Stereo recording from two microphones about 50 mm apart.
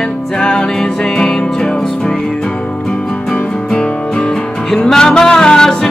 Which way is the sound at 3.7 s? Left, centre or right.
Centre.